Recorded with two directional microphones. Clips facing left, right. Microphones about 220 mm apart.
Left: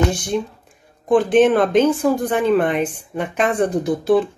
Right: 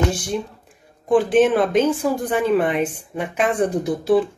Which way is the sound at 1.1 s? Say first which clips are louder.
Left 2 dB; 5° right (ahead or behind).